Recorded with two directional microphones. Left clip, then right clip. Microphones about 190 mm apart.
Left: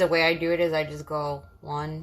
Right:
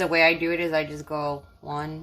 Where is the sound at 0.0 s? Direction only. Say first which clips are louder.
Right 2 dB; 30° right (ahead or behind).